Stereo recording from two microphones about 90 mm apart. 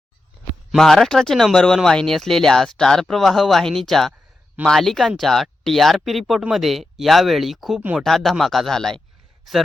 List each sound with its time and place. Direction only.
0.7 s speech: 5° left (ahead or behind)
7.8 s speech: 15° right (ahead or behind)
8.0 s speech: 5° left (ahead or behind)